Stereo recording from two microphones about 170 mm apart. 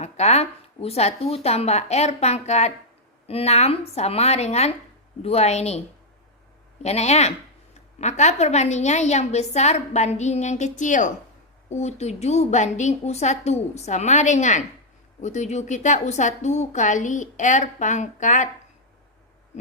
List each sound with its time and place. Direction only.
0.0 s speech: 40° left (ahead or behind)
6.8 s a woman's voice: 40° left (ahead or behind)